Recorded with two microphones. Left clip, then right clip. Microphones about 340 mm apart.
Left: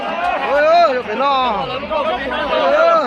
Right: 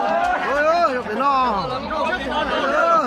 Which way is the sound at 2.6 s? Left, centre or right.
Centre.